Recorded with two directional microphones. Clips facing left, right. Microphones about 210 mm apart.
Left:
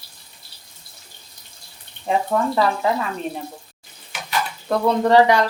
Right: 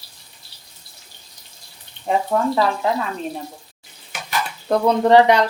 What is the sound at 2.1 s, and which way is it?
Speech, centre (ahead or behind).